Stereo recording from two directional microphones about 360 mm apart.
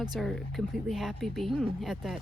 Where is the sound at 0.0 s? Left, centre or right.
Centre.